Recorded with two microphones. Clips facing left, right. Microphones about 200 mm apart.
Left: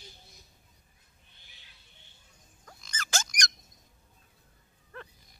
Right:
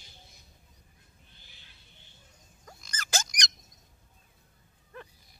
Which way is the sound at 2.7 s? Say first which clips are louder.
Right 1 dB; 5° right (ahead or behind).